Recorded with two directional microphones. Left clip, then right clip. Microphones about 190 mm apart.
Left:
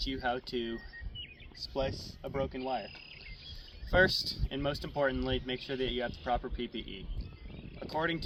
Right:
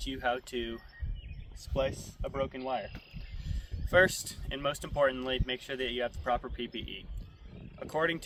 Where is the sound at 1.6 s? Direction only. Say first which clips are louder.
Left 4 dB; 40° right (ahead or behind).